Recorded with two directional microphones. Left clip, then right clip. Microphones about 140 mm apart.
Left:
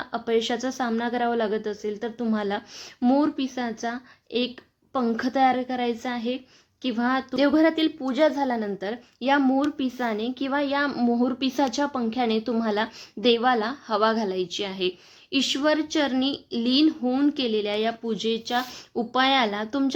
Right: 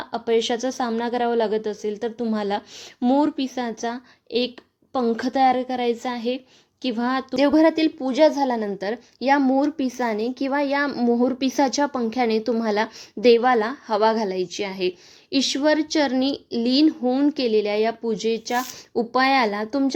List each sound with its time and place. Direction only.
0.0 s a woman's voice: 30° right (ahead or behind)